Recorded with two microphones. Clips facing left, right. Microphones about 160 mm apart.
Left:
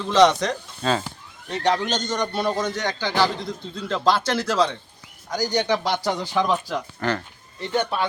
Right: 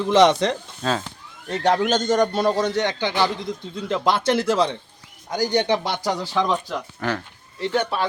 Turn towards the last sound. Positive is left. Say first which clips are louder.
# right 1 dB
turn(degrees=0)  # may be behind; listen again after turning